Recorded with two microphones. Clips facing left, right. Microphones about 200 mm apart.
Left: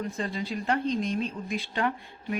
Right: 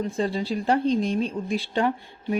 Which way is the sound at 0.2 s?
30° right (ahead or behind).